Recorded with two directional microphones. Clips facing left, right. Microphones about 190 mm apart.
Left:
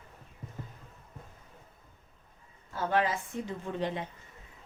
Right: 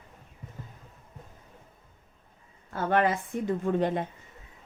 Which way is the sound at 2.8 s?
60° right (ahead or behind).